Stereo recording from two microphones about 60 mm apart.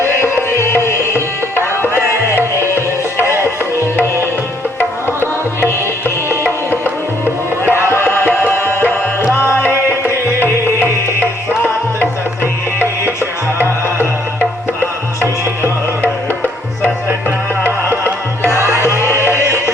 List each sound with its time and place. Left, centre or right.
0.0 s music: left
0.9 s tabla: left
2.7 s music: left
7.6 s music: left
17.6 s music: left
18.5 s music: right